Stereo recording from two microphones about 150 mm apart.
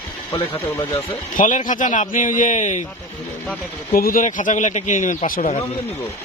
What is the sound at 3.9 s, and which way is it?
A man's voice, 75° left (ahead or behind).